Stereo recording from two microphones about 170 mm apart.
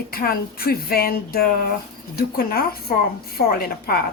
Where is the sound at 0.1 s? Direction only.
60° left (ahead or behind).